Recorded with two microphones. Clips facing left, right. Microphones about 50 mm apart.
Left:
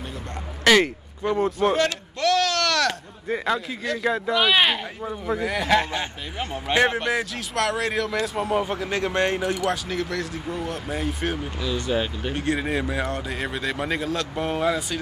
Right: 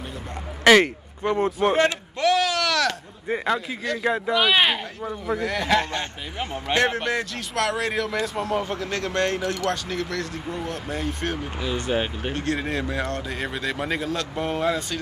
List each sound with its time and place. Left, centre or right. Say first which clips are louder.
0.7 s speech: right 2 dB; right
1.6 s bleat: right 1 dB; right; by 2.9 s centre
3.3 s a man's voice: even; centre
4.3 s speech: even; centre
5.2 s speech: even; centre
8.5 s speech: left 2 dB; centre
9.8 s speech: left 1 dB; centre
11.6 s speech: even; right
12.4 s speech: left 2 dB; centre